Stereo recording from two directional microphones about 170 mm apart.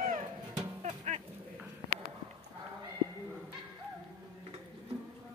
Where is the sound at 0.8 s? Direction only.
45° right (ahead or behind).